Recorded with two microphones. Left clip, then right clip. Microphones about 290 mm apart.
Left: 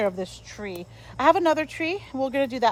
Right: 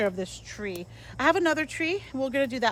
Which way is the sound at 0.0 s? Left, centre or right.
Centre.